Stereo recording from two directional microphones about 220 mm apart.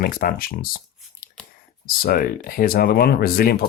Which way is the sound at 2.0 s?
45° left (ahead or behind).